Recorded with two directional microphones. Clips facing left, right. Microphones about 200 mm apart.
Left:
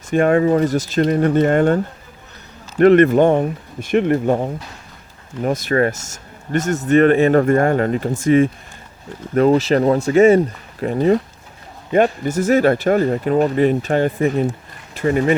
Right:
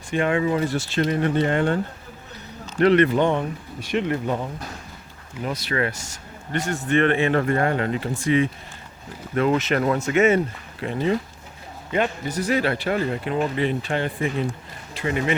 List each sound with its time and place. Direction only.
0.1 s speech: 45° left (ahead or behind)